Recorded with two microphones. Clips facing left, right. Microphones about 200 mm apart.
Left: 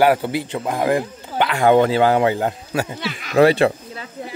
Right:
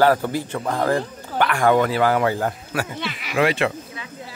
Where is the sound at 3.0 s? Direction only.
5° right (ahead or behind).